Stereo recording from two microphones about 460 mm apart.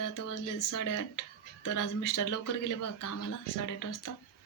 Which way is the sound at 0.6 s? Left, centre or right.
Left.